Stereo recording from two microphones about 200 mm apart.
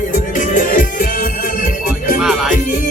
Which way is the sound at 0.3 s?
40° left (ahead or behind).